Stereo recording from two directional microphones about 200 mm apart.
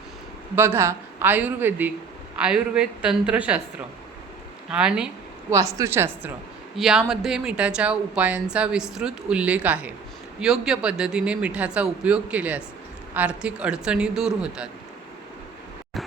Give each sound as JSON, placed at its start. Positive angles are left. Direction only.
{"t": 0.5, "sound": "a woman's voice", "side_deg": -10}
{"t": 4.7, "sound": "a woman's voice", "side_deg": -5}
{"t": 5.5, "sound": "a woman's voice", "side_deg": -15}